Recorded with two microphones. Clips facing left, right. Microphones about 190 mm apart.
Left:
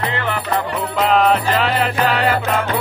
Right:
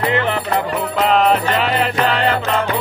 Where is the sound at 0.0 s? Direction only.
20° right (ahead or behind).